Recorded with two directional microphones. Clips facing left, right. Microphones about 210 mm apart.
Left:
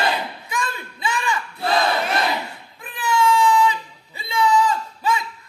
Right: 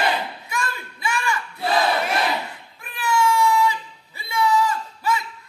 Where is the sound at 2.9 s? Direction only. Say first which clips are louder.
Left 1 dB; 20° left (ahead or behind).